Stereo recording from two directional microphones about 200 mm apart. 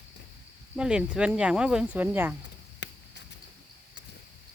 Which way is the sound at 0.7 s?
5° right (ahead or behind).